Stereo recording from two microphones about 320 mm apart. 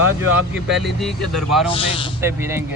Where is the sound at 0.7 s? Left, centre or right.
Centre.